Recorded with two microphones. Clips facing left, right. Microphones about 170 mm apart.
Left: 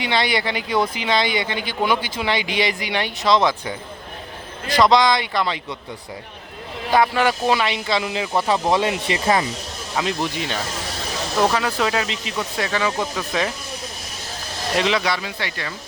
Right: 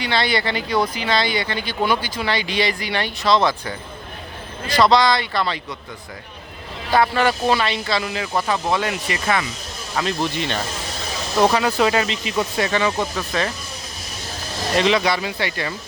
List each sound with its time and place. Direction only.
0.0 s speech: 15° left (ahead or behind)
6.9 s speech: 15° left (ahead or behind)
8.4 s speech: 30° left (ahead or behind)
9.9 s speech: 10° left (ahead or behind)
14.8 s speech: centre (ahead or behind)